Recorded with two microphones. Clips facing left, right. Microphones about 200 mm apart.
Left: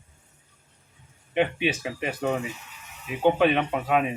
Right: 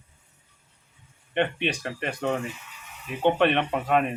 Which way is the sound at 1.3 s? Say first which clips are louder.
Left 2 dB; 5° left (ahead or behind).